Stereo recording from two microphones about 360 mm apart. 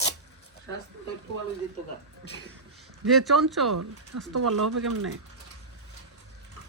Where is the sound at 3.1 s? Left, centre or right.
Centre.